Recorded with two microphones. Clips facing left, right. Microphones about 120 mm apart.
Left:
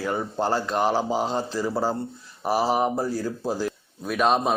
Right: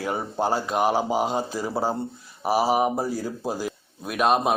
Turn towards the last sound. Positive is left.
turn(degrees=-5)  # may be behind; listen again after turning